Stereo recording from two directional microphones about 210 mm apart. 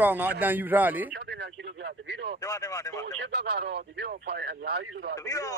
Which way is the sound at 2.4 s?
15° left (ahead or behind).